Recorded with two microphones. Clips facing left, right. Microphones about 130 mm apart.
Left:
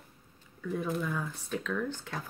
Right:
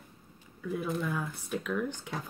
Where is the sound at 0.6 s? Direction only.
5° right (ahead or behind).